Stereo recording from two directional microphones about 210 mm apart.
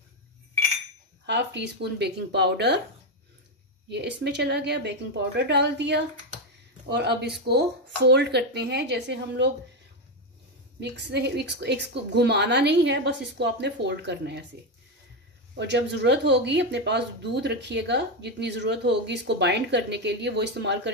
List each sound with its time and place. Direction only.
1.2 s a woman's voice: 55° right (ahead or behind)
3.9 s a woman's voice: 55° right (ahead or behind)
10.8 s a woman's voice: 55° right (ahead or behind)
15.5 s speech: 55° right (ahead or behind)